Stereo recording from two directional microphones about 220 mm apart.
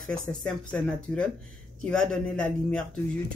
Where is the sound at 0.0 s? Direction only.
5° left (ahead or behind).